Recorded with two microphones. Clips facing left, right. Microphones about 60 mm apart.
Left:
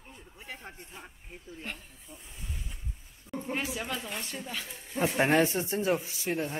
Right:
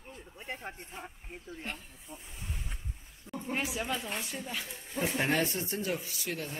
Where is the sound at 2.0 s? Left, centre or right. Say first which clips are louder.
Right 1 dB; right.